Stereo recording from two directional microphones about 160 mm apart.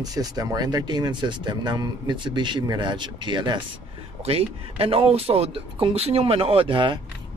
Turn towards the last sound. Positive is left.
turn(degrees=-30)  # may be behind; listen again after turning